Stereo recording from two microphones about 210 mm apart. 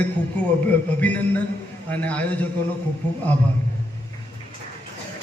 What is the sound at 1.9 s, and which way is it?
Speech, 5° left (ahead or behind).